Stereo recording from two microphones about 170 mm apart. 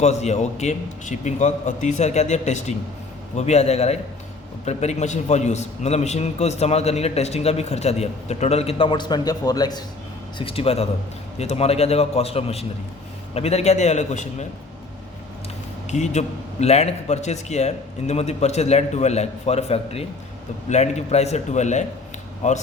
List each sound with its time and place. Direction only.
0.0 s a man's voice: 40° left (ahead or behind)
15.9 s a man's voice: 45° left (ahead or behind)